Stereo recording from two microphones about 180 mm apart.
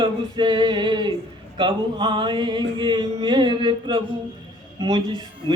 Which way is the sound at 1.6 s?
25° right (ahead or behind).